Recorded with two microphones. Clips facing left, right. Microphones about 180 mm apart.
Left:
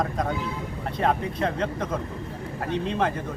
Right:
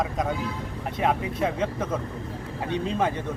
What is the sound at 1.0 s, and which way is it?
Speech, 5° right (ahead or behind).